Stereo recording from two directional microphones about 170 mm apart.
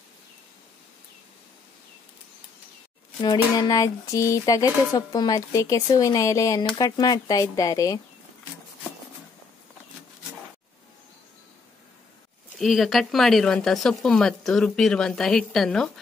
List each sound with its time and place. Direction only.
3.2 s speech: 25° left (ahead or behind)
12.5 s speech: centre (ahead or behind)